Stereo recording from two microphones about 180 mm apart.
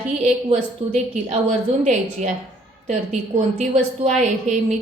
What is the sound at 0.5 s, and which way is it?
A woman's voice, 40° right (ahead or behind).